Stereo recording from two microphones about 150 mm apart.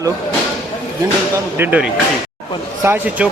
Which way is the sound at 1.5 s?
10° right (ahead or behind).